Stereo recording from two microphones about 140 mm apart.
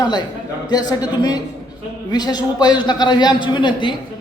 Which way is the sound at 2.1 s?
30° left (ahead or behind).